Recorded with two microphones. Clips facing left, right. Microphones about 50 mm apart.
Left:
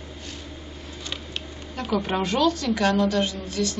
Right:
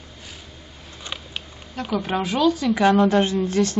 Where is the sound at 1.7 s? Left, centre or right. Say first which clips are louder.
Right 1 dB; centre.